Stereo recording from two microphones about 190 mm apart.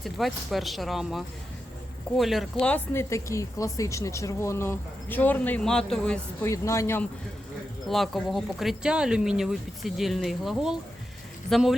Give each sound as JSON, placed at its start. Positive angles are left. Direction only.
{"t": 0.0, "sound": "speech", "side_deg": 0}
{"t": 6.5, "sound": "speech", "side_deg": 15}
{"t": 7.9, "sound": "speech", "side_deg": 0}